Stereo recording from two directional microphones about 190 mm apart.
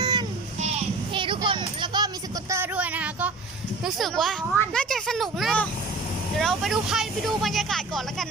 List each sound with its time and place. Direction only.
0.0 s child singing: 20° right (ahead or behind)
1.1 s music: 25° right (ahead or behind)
2.5 s a sound: 10° right (ahead or behind)
3.8 s speech: centre (ahead or behind)